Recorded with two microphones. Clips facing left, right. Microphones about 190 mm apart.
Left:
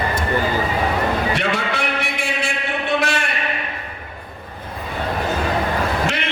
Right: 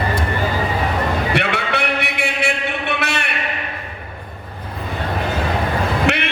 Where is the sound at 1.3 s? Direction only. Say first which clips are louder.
Right 1 dB; 65° right (ahead or behind).